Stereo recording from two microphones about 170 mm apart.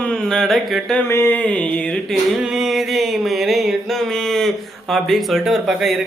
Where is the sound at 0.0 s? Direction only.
5° left (ahead or behind).